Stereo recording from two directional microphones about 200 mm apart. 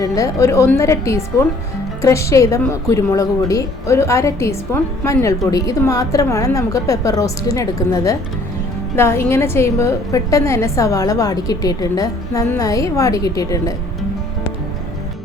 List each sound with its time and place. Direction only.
0.0 s a woman's voice: 15° left (ahead or behind)